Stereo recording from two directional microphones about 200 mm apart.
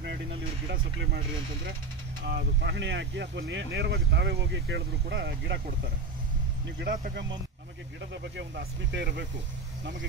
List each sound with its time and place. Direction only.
2.2 s speech: 55° right (ahead or behind)
6.8 s speech: 55° right (ahead or behind)